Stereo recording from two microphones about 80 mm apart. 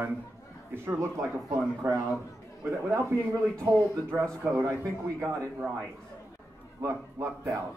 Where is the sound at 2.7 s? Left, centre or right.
Right.